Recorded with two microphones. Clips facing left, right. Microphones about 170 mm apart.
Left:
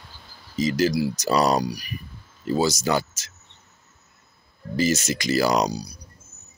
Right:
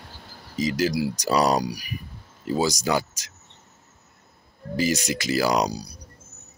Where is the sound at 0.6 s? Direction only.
10° right (ahead or behind).